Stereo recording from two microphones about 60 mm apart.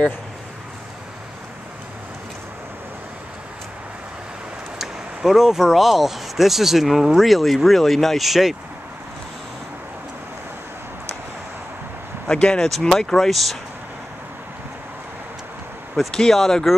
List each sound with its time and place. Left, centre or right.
4.7 s speech: centre
12.3 s speech: centre
16.0 s speech: centre